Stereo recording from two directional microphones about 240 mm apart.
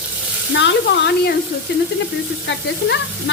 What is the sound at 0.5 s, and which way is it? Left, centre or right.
Sizzle, left.